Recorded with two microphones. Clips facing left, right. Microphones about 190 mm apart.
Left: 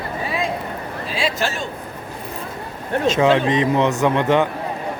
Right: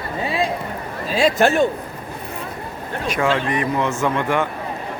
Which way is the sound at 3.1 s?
20° left (ahead or behind).